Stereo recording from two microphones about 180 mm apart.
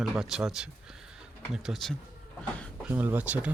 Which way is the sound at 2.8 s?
10° right (ahead or behind).